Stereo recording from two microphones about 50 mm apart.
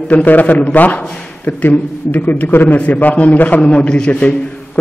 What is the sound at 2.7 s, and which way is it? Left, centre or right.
Speech, left.